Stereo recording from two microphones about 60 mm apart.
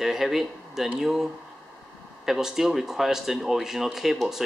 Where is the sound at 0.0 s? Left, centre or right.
Centre.